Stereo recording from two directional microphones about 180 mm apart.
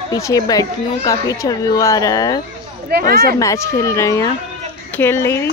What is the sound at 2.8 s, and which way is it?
Speech, 60° right (ahead or behind).